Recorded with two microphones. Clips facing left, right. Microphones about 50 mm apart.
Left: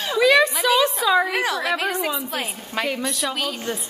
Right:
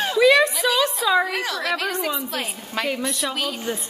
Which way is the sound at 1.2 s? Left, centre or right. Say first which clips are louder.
Left 2 dB; centre.